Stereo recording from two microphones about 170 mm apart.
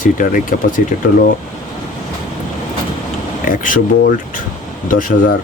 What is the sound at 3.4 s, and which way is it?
Speech, 55° left (ahead or behind).